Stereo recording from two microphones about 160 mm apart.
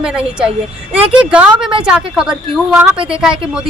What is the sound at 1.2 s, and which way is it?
A woman's voice, 5° right (ahead or behind).